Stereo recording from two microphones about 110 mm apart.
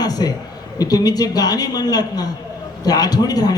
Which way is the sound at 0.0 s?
35° left (ahead or behind).